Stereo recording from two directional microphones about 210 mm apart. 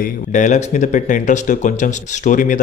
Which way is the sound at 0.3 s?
35° left (ahead or behind).